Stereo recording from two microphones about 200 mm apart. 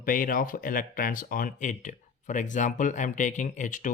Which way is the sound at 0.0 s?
45° left (ahead or behind).